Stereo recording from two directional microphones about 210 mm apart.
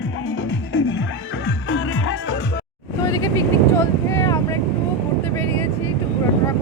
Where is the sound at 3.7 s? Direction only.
10° left (ahead or behind).